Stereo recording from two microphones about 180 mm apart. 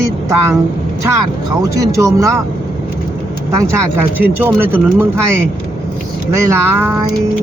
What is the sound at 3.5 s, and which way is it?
Speech, 15° right (ahead or behind).